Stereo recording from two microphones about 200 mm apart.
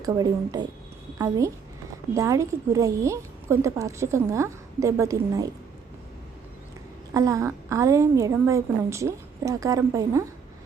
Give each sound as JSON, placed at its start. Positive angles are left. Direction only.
{"t": 0.0, "sound": "a woman's voice", "side_deg": -20}
{"t": 7.1, "sound": "a woman's voice", "side_deg": -15}